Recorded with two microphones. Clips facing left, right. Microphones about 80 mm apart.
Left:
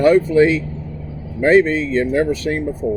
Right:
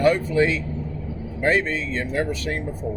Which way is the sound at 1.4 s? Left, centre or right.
Left.